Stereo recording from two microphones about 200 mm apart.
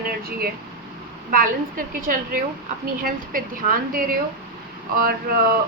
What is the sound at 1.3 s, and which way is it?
A woman's voice, 45° right (ahead or behind).